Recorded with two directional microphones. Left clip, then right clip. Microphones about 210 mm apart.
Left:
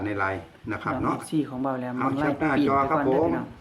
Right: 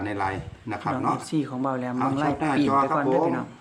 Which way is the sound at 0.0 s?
5° right (ahead or behind).